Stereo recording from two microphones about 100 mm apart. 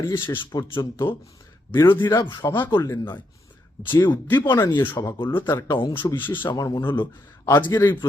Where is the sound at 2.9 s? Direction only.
25° left (ahead or behind); by 6.6 s 50° left (ahead or behind).